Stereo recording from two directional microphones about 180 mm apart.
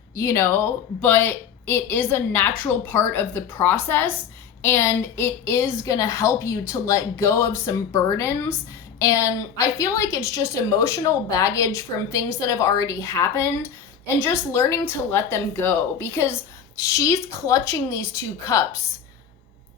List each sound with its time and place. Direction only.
0.2 s a woman's voice: 15° left (ahead or behind)